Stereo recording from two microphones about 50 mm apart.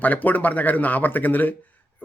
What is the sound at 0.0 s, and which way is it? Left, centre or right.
Speech, left.